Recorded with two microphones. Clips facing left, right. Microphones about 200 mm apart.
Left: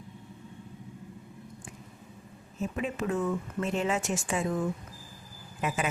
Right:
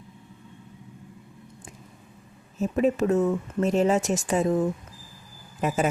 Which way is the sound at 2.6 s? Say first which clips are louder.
Right 9 dB; 40° right (ahead or behind).